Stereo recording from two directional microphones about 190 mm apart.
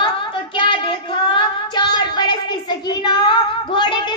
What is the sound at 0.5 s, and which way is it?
Child singing, 25° left (ahead or behind).